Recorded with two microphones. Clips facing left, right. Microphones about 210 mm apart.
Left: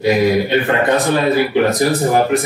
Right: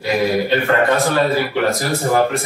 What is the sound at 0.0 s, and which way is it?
Speech, 15° left (ahead or behind).